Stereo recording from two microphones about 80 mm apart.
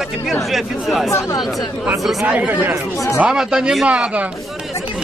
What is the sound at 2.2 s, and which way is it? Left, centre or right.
Speech, centre.